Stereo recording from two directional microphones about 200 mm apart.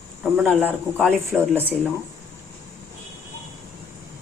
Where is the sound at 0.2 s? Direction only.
5° right (ahead or behind).